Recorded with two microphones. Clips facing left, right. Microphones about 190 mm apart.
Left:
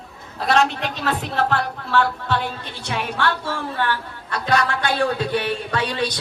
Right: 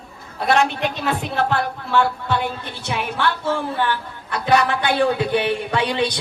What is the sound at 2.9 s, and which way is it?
A woman's voice, 15° right (ahead or behind).